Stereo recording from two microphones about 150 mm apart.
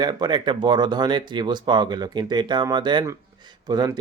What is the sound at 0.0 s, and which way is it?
Speech, 30° right (ahead or behind).